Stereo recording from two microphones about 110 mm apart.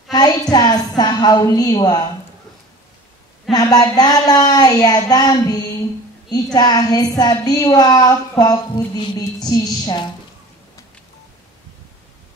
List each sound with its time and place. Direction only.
0.1 s a woman's voice: 40° left (ahead or behind)
3.5 s a woman's voice: 35° left (ahead or behind)